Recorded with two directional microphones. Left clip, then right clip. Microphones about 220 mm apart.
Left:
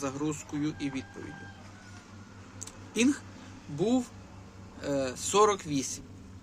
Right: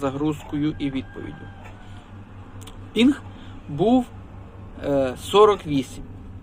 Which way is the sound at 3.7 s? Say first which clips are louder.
Right 9 dB; 20° left (ahead or behind).